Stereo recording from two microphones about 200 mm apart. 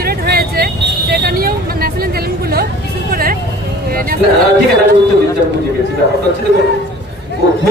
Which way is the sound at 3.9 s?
45° right (ahead or behind).